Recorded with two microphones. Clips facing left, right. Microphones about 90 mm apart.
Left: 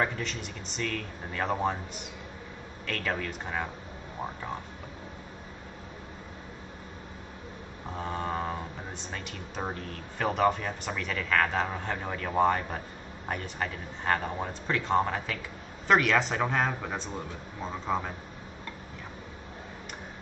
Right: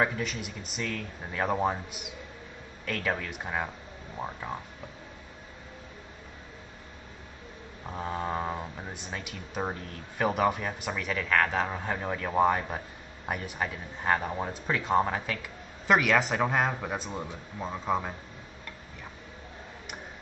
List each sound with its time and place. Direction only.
0.0 s speech: 5° right (ahead or behind)
7.9 s speech: 5° right (ahead or behind)